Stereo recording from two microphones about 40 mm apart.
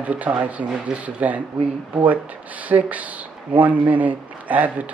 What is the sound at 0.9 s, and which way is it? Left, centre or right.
Speech, right.